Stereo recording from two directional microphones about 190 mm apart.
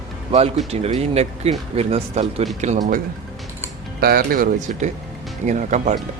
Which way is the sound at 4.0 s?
50° right (ahead or behind).